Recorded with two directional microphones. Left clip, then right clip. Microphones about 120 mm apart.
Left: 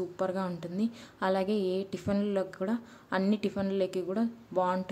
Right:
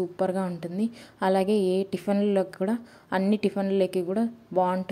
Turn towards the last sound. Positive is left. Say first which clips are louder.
# right 5 dB
turn(degrees=-30)  # may be behind; listen again after turning